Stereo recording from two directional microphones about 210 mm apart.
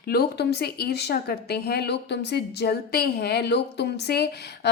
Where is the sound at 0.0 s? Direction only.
50° left (ahead or behind).